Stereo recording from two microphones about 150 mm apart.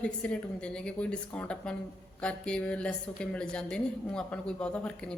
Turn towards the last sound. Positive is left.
turn(degrees=5)  # may be behind; listen again after turning